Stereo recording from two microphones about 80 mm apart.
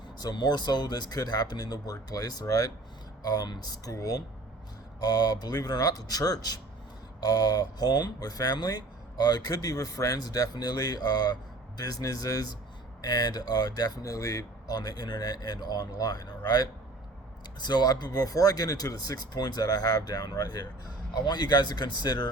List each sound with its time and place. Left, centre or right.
0.2 s speech: left
17.7 s speech: left